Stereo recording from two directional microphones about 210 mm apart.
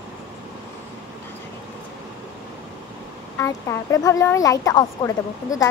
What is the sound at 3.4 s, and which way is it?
A woman's voice, 15° left (ahead or behind).